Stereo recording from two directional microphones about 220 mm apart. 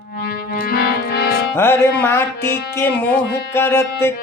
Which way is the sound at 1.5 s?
10° left (ahead or behind).